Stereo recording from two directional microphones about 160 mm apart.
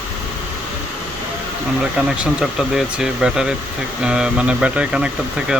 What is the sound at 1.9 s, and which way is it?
Speech, 5° right (ahead or behind).